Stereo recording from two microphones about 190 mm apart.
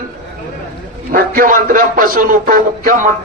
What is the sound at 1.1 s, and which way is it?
A man's voice, 50° right (ahead or behind).